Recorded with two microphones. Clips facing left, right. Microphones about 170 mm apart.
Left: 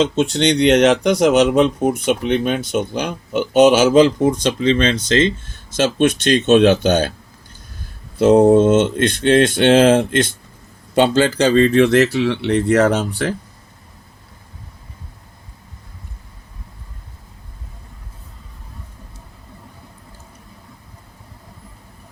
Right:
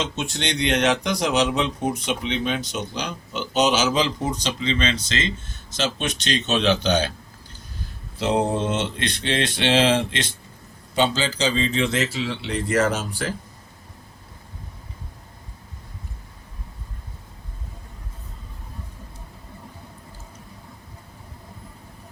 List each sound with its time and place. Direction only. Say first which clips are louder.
0.2 s speech: left 11 dB; 60° left (ahead or behind)
8.2 s speech: left 12 dB; 45° left (ahead or behind); by 13.3 s 65° left (ahead or behind)